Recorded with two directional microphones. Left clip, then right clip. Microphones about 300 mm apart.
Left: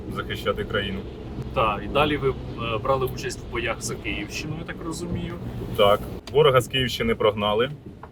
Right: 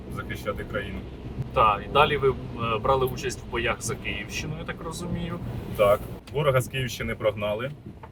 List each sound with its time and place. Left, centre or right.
0.2 s speech: left
1.5 s speech: centre
5.7 s speech: centre